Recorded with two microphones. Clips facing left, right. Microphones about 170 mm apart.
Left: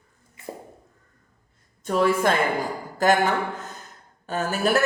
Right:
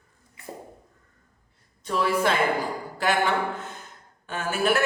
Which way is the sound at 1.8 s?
45° left (ahead or behind).